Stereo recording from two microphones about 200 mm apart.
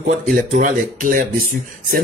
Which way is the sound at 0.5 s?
40° right (ahead or behind).